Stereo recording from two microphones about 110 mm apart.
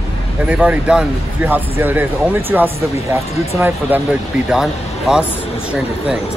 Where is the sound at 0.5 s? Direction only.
10° right (ahead or behind).